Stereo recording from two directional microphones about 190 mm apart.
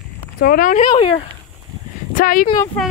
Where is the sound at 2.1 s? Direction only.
45° left (ahead or behind).